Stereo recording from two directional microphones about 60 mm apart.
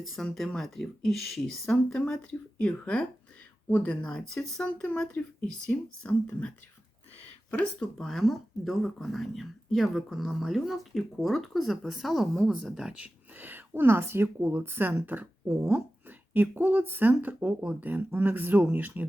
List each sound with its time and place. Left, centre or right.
0.0 s speech: centre
3.7 s speech: left
4.0 s speech: centre
4.8 s speech: left
7.6 s speech: centre
12.7 s speech: centre
13.3 s speech: right
14.3 s speech: right